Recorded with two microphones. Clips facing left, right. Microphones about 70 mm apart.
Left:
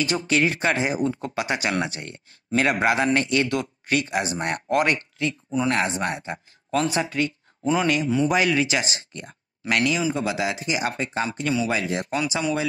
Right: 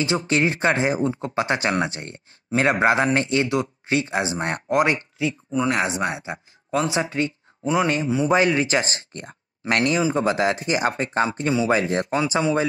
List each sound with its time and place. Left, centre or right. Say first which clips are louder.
0.3 s speech: right 1 dB; right
11.2 s speech: right 2 dB; right